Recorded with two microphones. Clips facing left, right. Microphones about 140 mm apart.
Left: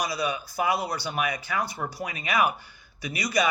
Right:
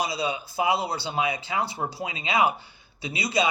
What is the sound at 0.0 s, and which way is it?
Speech, 25° right (ahead or behind).